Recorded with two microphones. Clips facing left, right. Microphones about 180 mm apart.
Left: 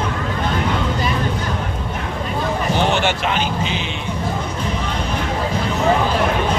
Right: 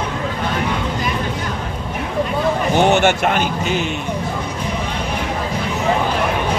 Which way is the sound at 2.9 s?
45° right (ahead or behind).